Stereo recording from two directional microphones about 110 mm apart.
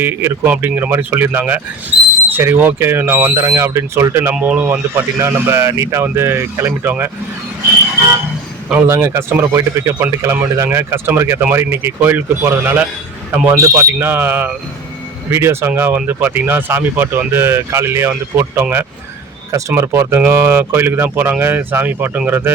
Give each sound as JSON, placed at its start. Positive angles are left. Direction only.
{"t": 0.0, "sound": "speech", "side_deg": -20}
{"t": 4.4, "sound": "speech", "side_deg": -10}
{"t": 8.9, "sound": "speech", "side_deg": -25}